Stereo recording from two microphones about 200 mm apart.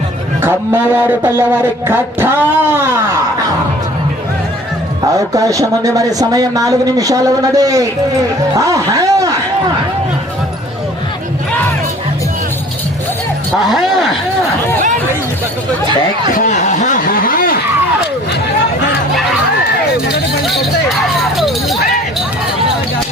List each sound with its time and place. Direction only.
0.4 s speech: 10° right (ahead or behind)
5.1 s speech: 15° right (ahead or behind)
13.7 s speech: centre (ahead or behind)
16.3 s a sound: 40° left (ahead or behind)
21.2 s chink: centre (ahead or behind)